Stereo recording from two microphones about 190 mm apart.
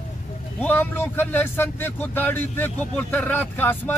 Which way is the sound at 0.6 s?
10° left (ahead or behind).